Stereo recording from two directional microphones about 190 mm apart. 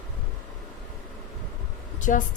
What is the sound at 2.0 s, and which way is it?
Speech, 45° left (ahead or behind).